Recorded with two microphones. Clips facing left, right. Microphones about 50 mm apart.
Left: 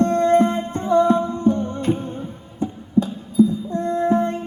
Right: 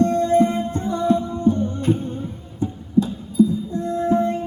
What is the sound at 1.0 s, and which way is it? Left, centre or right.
Humming, left.